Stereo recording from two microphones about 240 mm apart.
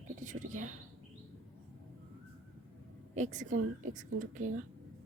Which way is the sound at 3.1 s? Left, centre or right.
Right.